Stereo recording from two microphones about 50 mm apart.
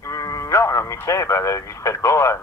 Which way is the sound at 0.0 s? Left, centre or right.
Left.